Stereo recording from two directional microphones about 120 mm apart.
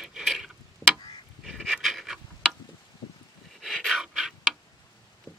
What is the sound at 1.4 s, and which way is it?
Goose, centre (ahead or behind).